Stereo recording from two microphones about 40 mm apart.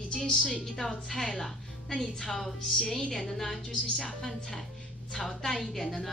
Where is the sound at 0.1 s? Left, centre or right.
Centre.